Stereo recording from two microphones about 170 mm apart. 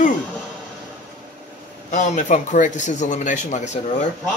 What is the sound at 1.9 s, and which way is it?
A man's voice, 45° left (ahead or behind).